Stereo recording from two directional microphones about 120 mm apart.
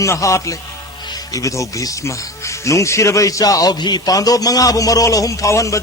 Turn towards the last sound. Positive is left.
turn(degrees=25)  # may be behind; listen again after turning